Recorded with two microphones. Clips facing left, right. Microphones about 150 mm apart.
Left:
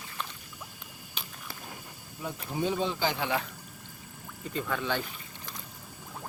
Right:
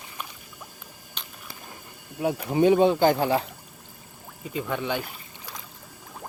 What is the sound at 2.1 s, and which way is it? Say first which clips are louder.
Speech: right 11 dB; 70° right (ahead or behind).